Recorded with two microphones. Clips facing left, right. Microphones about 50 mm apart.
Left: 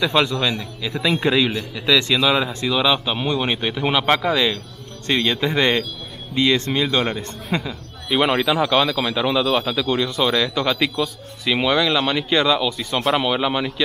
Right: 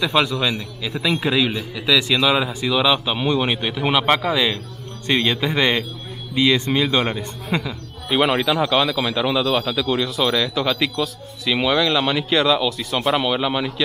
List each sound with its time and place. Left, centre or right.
0.0 s a man's voice: centre
7.4 s a man's voice: centre